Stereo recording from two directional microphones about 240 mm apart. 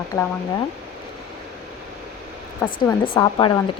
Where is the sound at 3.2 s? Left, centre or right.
Centre.